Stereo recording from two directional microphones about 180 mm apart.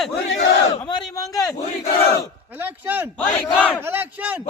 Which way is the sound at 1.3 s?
Centre (ahead or behind).